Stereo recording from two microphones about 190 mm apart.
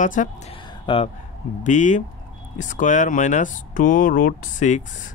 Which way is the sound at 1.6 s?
40° left (ahead or behind).